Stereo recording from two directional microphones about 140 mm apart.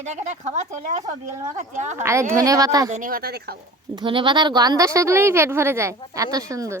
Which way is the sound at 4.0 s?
35° right (ahead or behind).